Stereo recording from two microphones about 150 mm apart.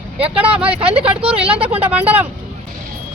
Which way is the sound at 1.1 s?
40° right (ahead or behind).